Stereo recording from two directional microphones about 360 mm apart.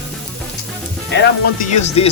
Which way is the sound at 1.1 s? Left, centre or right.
Left.